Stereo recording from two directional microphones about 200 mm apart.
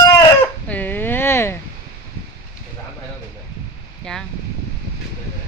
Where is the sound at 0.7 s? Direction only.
10° left (ahead or behind).